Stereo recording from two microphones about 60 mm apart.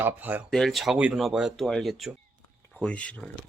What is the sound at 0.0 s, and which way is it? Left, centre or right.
Speech, right.